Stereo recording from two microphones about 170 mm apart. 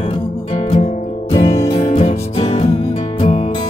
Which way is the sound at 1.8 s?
35° left (ahead or behind).